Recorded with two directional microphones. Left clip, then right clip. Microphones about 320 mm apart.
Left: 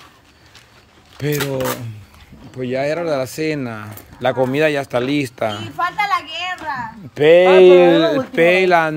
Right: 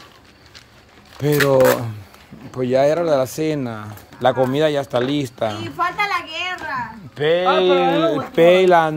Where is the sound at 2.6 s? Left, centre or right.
Centre.